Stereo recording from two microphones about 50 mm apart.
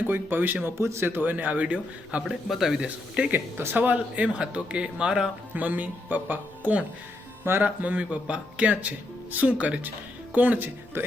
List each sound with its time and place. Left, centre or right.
0.1 s speech: right
0.8 s speech: right
1.1 s speech: right
2.2 s a man's voice: centre
3.2 s speech: right
5.5 s speech: right
11.0 s speech: right